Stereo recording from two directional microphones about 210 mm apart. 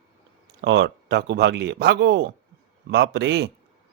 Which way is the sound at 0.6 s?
55° right (ahead or behind).